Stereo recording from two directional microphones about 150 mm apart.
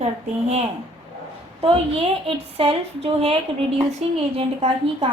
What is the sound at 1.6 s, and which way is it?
A woman's voice, 40° right (ahead or behind).